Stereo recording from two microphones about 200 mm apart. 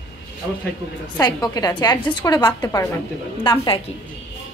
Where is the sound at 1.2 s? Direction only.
20° left (ahead or behind).